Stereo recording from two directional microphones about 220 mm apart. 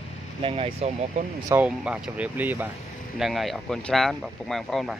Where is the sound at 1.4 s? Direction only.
5° right (ahead or behind).